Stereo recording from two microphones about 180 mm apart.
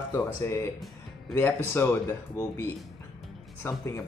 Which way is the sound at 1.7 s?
15° left (ahead or behind).